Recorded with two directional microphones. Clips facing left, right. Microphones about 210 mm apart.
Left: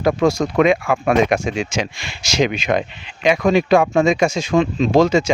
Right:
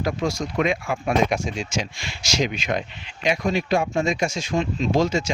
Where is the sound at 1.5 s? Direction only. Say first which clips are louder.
Left 6 dB; 65° left (ahead or behind).